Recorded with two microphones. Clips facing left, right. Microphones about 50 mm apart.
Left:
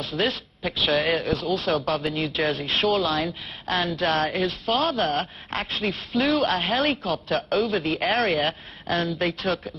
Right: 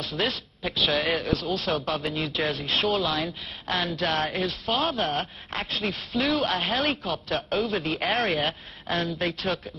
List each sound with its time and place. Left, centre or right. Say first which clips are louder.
0.2 s speech: left 3 dB; centre
1.3 s speech: left 2 dB; centre
1.6 s speech: left 3 dB; centre